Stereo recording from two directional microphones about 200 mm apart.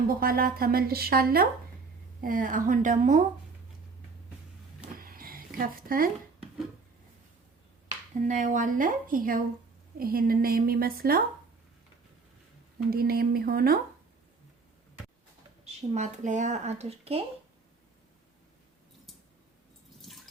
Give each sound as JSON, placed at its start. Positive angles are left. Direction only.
{"t": 0.1, "sound": "speech", "side_deg": -45}
{"t": 4.9, "sound": "a sound", "side_deg": -45}
{"t": 5.5, "sound": "speech", "side_deg": -45}
{"t": 8.3, "sound": "speech", "side_deg": -40}
{"t": 12.9, "sound": "speech", "side_deg": -50}
{"t": 15.9, "sound": "speech", "side_deg": -35}
{"t": 20.0, "sound": "water", "side_deg": 0}